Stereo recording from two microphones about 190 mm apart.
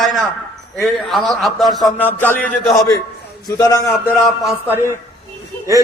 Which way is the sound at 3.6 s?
20° left (ahead or behind).